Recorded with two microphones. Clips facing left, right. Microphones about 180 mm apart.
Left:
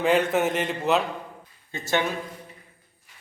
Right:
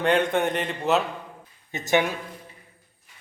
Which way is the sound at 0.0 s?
5° left (ahead or behind).